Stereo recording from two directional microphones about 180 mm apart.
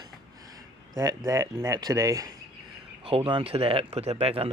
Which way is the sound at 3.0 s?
35° right (ahead or behind).